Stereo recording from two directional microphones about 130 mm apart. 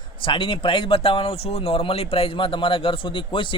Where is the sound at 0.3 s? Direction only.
40° left (ahead or behind).